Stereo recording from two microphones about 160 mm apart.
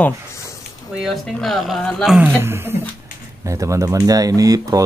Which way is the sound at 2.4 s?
15° right (ahead or behind).